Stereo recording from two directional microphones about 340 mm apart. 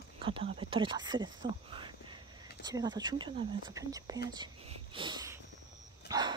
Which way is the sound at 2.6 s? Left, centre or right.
Centre.